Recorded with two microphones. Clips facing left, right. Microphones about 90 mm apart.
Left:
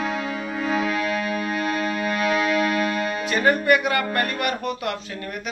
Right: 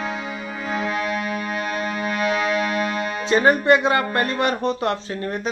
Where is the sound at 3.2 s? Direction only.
25° right (ahead or behind).